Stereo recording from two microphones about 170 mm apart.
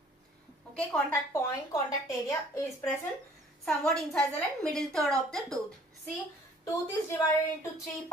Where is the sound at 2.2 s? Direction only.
15° left (ahead or behind).